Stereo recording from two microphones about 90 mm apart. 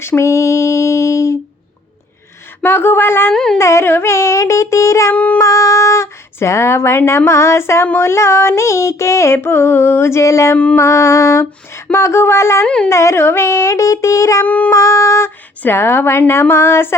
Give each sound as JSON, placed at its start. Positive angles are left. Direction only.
{"t": 0.0, "sound": "female singing", "side_deg": 30}
{"t": 2.6, "sound": "music", "side_deg": 25}
{"t": 3.3, "sound": "a sound", "side_deg": 5}
{"t": 3.6, "sound": "speech", "side_deg": 30}
{"t": 5.1, "sound": "a sound", "side_deg": 15}
{"t": 5.4, "sound": "speech", "side_deg": 35}
{"t": 7.9, "sound": "music", "side_deg": 25}
{"t": 10.8, "sound": "speech", "side_deg": 30}
{"t": 12.6, "sound": "a sound", "side_deg": 10}
{"t": 12.9, "sound": "speech", "side_deg": 35}
{"t": 14.4, "sound": "a sound", "side_deg": 20}
{"t": 14.7, "sound": "speech", "side_deg": 35}
{"t": 15.6, "sound": "music", "side_deg": 25}